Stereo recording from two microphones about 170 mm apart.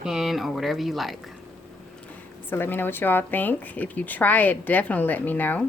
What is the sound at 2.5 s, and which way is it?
Speech, 10° left (ahead or behind).